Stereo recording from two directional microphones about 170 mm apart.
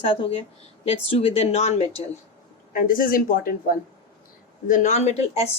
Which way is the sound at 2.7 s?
50° left (ahead or behind).